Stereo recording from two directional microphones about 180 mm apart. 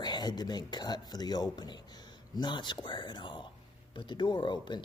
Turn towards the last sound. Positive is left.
turn(degrees=25)  # may be behind; listen again after turning